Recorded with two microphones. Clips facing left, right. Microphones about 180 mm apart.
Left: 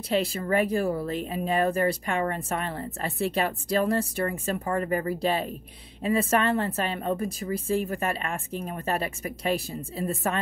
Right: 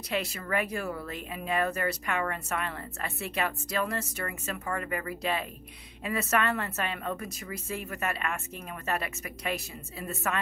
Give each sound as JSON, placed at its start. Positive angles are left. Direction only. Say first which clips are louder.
{"t": 0.1, "sound": "speech", "louder": "left 6 dB", "side_deg": 30}